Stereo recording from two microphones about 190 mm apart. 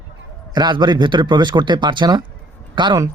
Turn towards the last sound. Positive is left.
turn(degrees=-25)  # may be behind; listen again after turning